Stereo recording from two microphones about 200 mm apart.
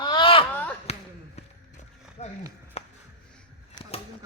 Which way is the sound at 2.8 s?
35° left (ahead or behind).